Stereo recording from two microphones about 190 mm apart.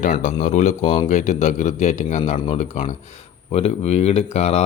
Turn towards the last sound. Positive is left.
turn(degrees=35)  # may be behind; listen again after turning